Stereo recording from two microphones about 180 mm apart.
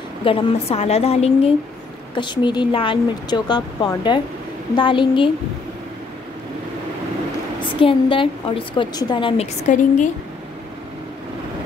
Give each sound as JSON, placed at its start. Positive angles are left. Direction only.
{"t": 0.2, "sound": "a woman's voice", "side_deg": 30}
{"t": 7.8, "sound": "a woman's voice", "side_deg": 30}